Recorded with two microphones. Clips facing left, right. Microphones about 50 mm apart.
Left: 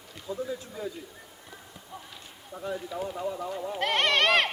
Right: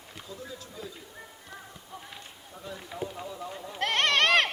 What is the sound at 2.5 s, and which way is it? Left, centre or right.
Speech, left.